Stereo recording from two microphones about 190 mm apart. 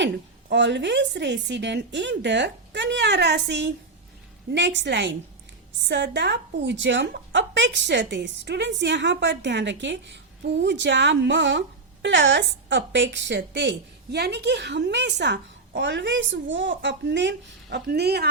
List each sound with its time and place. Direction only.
0.5 s a woman's voice: 70° right (ahead or behind)